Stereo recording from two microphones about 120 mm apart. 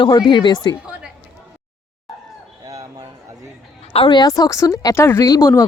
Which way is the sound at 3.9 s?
45° left (ahead or behind).